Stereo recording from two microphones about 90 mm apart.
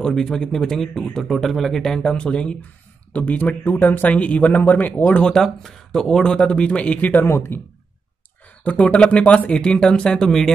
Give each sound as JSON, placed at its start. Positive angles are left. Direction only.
{"t": 0.0, "sound": "speech", "side_deg": 5}
{"t": 5.3, "sound": "speech", "side_deg": 5}
{"t": 8.6, "sound": "speech", "side_deg": 15}